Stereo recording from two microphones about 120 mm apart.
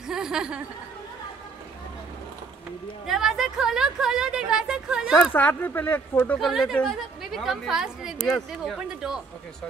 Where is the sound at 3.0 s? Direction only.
5° right (ahead or behind).